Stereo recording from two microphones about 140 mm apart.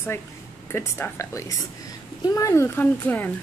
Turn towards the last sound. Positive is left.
turn(degrees=15)  # may be behind; listen again after turning